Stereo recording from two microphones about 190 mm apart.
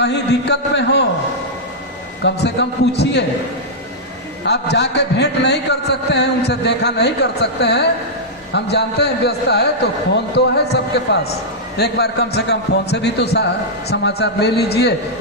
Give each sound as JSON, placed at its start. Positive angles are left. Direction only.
{"t": 0.0, "sound": "a man's voice", "side_deg": 60}
{"t": 2.2, "sound": "a man's voice", "side_deg": 65}
{"t": 4.4, "sound": "a man's voice", "side_deg": 60}